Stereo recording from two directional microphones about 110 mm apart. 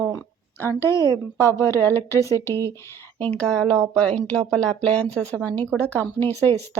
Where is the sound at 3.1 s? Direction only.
15° left (ahead or behind).